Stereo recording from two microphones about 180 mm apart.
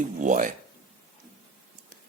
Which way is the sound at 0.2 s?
45° right (ahead or behind).